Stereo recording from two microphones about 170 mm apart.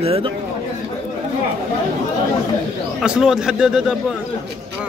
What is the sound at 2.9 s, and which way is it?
A man's voice, 5° right (ahead or behind).